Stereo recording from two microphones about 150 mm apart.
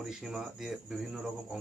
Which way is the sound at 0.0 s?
5° right (ahead or behind).